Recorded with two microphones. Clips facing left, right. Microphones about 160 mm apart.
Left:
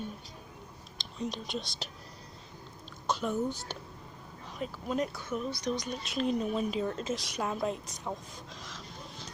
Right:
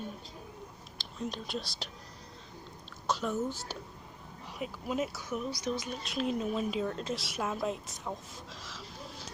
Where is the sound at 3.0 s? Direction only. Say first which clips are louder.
Left 1 dB; centre (ahead or behind).